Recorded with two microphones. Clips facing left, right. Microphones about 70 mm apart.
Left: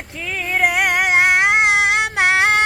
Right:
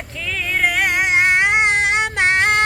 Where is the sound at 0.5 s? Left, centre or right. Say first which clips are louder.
Left 2 dB; centre.